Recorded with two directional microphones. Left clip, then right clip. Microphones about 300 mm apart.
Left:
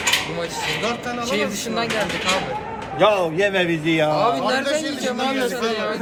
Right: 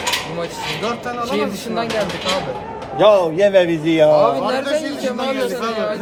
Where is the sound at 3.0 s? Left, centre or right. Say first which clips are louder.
Right 5 dB; right.